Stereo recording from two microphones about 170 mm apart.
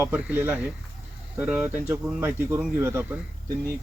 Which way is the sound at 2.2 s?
15° right (ahead or behind).